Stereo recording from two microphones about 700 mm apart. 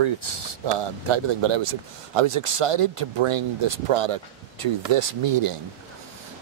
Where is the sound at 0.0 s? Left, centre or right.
Right.